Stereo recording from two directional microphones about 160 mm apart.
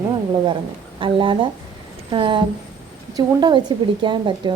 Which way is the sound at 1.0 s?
35° right (ahead or behind).